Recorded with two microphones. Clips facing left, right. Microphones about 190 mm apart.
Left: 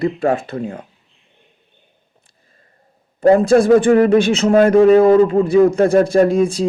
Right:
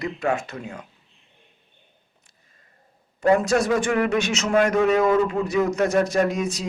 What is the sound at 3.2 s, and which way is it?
A man's voice, 30° left (ahead or behind).